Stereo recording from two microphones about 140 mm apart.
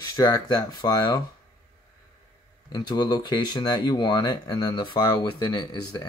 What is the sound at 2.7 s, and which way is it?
Speech, 30° left (ahead or behind).